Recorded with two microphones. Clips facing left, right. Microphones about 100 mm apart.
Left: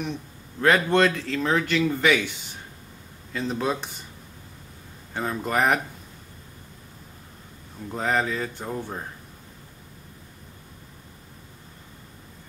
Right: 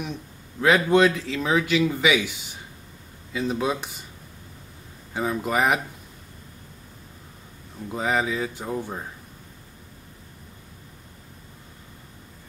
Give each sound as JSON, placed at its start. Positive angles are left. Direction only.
{"t": 0.6, "sound": "speech", "side_deg": -5}
{"t": 5.1, "sound": "speech", "side_deg": -5}
{"t": 7.9, "sound": "speech", "side_deg": -5}